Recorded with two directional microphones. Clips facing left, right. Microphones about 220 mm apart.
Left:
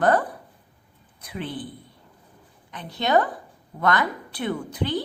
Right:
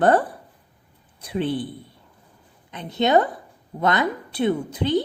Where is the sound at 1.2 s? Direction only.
30° right (ahead or behind).